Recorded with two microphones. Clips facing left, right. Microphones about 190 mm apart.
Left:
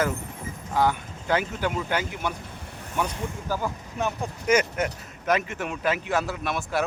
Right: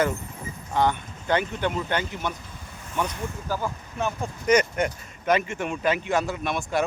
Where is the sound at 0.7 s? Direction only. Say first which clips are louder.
Even; 5° left (ahead or behind).